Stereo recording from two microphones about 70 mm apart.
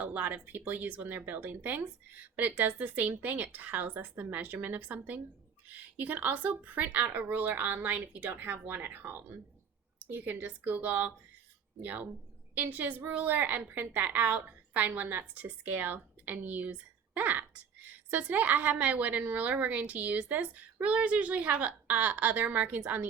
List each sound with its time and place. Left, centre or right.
0.0 s a woman's voice: right